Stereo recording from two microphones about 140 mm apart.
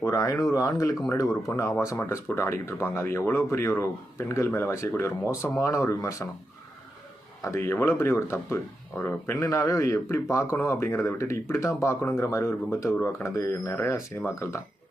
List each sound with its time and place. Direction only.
0.0 s speech: 20° left (ahead or behind)
7.4 s speech: 20° left (ahead or behind)